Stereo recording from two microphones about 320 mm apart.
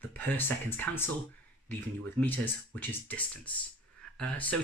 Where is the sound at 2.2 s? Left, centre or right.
Centre.